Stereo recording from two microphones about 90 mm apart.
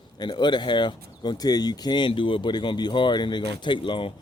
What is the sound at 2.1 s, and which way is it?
Speech, 70° left (ahead or behind).